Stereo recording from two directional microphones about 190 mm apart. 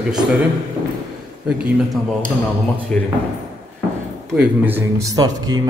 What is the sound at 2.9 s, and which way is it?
Speech, 5° left (ahead or behind).